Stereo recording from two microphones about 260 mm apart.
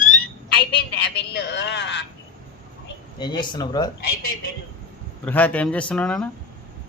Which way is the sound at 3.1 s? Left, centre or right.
Centre.